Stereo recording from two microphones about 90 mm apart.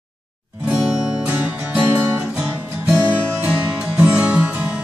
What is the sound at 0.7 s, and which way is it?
Music, 5° right (ahead or behind).